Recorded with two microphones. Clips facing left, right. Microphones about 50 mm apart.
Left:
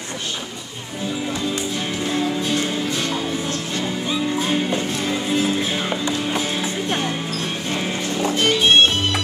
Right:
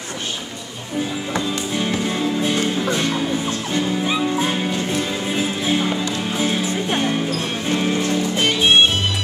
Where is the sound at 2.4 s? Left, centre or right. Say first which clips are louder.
Right 2 dB; right.